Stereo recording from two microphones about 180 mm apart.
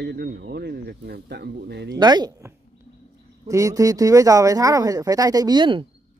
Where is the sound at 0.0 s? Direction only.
60° right (ahead or behind).